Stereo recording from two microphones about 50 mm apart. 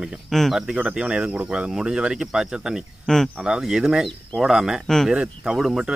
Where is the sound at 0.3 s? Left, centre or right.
Centre.